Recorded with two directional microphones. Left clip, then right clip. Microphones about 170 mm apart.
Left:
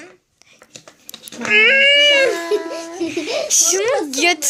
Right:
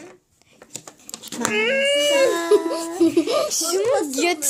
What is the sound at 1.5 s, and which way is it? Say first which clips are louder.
Speech: left 9 dB; centre (ahead or behind).